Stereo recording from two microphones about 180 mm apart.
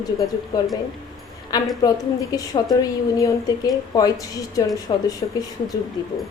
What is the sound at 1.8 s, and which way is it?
A woman's voice, 20° left (ahead or behind).